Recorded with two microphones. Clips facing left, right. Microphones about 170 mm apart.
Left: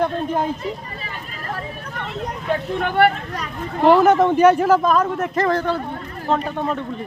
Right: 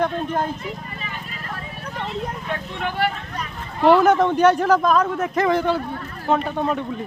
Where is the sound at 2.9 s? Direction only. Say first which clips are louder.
Left 8 dB; 60° left (ahead or behind).